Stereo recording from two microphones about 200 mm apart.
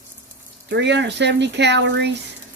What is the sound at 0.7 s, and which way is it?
Speech, 60° right (ahead or behind).